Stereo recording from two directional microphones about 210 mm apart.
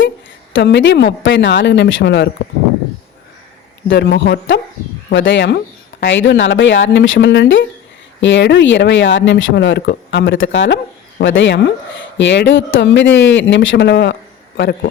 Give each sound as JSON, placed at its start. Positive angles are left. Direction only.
{"t": 0.5, "sound": "speech", "side_deg": 60}
{"t": 3.8, "sound": "speech", "side_deg": 55}